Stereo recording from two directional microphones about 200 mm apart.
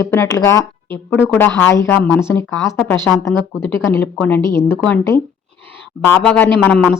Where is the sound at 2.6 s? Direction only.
15° left (ahead or behind).